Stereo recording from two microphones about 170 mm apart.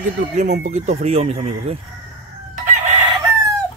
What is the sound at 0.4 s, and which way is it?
Speech, 45° right (ahead or behind).